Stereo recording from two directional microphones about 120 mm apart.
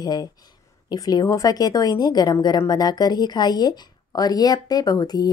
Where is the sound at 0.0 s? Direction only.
35° left (ahead or behind).